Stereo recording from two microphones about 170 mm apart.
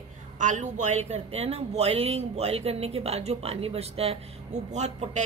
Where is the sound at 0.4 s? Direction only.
45° right (ahead or behind).